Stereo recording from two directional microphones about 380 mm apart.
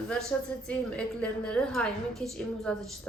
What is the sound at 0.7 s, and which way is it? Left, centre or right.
A woman's voice, centre.